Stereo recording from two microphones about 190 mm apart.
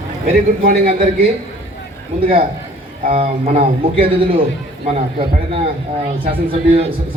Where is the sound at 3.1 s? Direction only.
30° right (ahead or behind).